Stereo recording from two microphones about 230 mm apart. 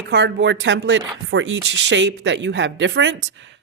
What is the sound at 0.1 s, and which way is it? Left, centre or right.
Speech, right.